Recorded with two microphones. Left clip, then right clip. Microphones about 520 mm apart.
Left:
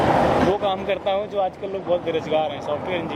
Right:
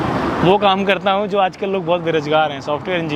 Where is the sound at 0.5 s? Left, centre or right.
Right.